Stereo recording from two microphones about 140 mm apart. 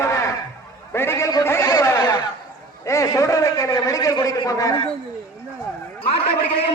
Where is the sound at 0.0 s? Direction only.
20° left (ahead or behind).